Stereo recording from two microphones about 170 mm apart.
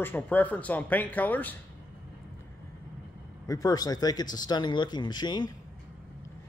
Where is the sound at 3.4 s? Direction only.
20° left (ahead or behind).